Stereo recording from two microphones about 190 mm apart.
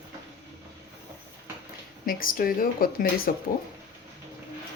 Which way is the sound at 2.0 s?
50° left (ahead or behind).